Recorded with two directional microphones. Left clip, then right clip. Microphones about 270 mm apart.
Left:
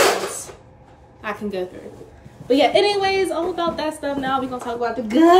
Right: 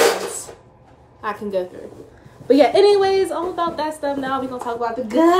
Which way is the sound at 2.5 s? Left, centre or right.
Centre.